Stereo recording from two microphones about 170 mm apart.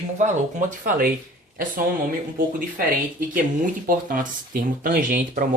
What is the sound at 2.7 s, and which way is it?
Speech, 55° right (ahead or behind).